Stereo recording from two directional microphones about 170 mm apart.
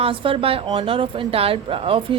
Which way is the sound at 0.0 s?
30° right (ahead or behind).